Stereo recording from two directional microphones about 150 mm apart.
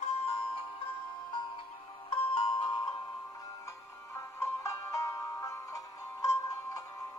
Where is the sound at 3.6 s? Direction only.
20° left (ahead or behind).